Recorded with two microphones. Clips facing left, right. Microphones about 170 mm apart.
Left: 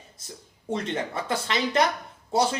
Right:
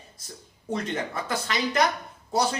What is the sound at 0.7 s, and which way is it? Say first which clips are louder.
Speech: left 1 dB; 25° left (ahead or behind).